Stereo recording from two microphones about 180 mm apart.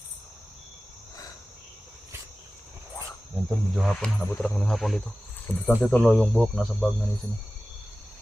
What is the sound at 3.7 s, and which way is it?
Speech, 5° left (ahead or behind).